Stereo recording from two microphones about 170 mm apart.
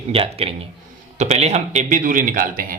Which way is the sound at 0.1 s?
35° right (ahead or behind).